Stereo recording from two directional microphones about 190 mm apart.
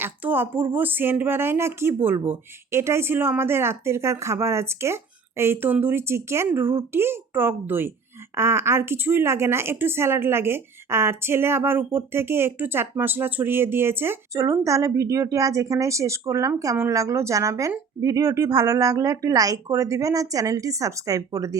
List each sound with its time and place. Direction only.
0.0 s speech: 10° right (ahead or behind)